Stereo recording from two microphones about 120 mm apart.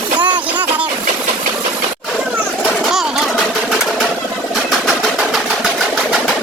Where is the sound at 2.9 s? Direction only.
Centre (ahead or behind).